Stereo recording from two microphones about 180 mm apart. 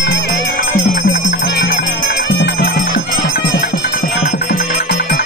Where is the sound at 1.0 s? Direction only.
70° left (ahead or behind).